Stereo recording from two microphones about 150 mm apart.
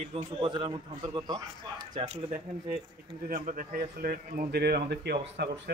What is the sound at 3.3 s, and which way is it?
A man's voice, 65° right (ahead or behind).